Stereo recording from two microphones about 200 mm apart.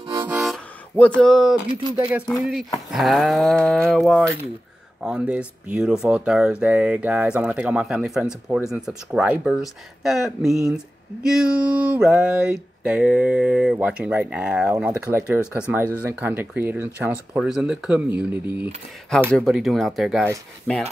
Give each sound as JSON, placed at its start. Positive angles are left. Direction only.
{"t": 0.2, "sound": "music", "side_deg": -5}
{"t": 0.9, "sound": "speech", "side_deg": 5}
{"t": 1.7, "sound": "speech", "side_deg": -25}
{"t": 2.1, "sound": "speech", "side_deg": 0}